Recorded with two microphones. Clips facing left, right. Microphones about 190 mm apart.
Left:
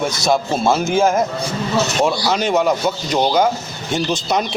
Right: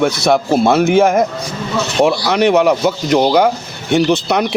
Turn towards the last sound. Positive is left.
turn(degrees=-65)  # may be behind; listen again after turning